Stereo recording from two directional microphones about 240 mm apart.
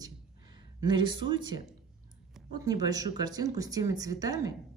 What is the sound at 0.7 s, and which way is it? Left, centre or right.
Speech, centre.